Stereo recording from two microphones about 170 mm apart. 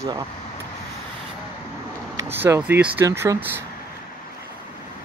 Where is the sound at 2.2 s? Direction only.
15° right (ahead or behind).